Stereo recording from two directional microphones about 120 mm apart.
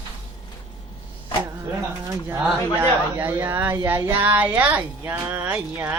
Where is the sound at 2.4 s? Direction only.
15° right (ahead or behind).